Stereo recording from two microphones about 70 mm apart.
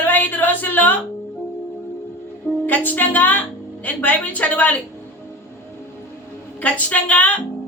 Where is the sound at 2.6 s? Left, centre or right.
Left.